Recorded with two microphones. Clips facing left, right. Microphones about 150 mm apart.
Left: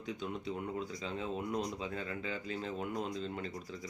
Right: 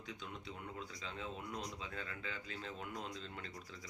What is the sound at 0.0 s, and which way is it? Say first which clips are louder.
Speech: left 9 dB; 15° left (ahead or behind).